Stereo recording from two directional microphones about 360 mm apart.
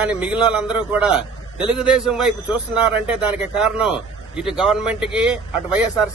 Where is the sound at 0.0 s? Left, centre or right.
Centre.